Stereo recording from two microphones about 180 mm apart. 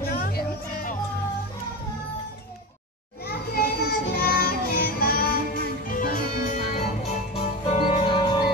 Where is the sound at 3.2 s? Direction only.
60° left (ahead or behind).